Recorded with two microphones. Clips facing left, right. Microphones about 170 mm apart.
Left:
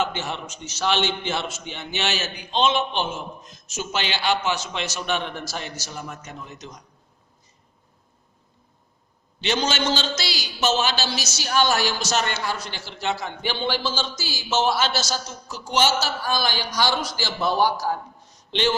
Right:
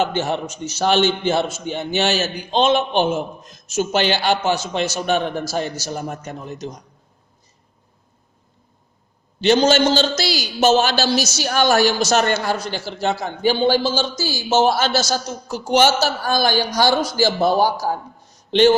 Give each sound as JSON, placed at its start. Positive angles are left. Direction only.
{"t": 0.1, "sound": "a man's voice", "side_deg": -45}
{"t": 9.4, "sound": "a man's voice", "side_deg": -40}